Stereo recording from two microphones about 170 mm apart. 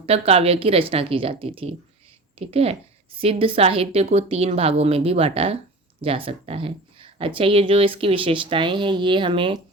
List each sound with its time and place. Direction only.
0.0 s speech: 35° right (ahead or behind)